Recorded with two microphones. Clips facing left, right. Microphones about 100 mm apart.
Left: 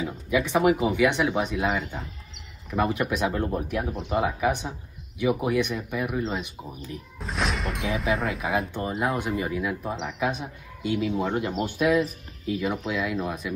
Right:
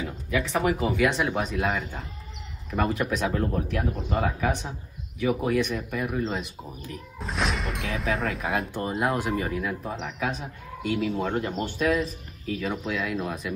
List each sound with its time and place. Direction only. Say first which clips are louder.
0.3 s speech: left 4 dB; 5° left (ahead or behind)